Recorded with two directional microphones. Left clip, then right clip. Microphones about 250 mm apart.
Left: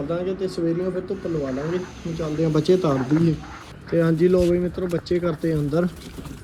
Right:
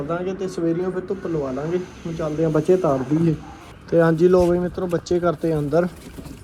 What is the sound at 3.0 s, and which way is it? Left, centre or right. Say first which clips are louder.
Speech: even; right.